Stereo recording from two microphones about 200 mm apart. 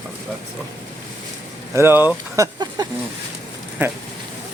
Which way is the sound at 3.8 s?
10° right (ahead or behind).